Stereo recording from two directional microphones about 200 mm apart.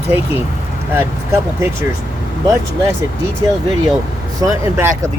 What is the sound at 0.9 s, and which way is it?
Speech, 10° right (ahead or behind).